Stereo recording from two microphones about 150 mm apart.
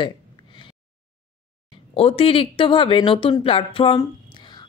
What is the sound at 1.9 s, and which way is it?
A woman's voice, 40° left (ahead or behind).